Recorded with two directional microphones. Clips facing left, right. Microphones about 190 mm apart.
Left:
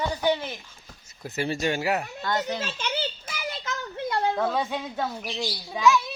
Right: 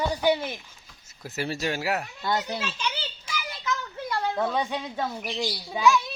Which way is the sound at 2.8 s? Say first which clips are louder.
Left 3 dB; 55° left (ahead or behind).